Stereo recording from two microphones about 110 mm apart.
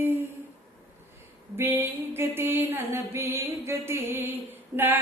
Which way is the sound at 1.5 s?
20° right (ahead or behind).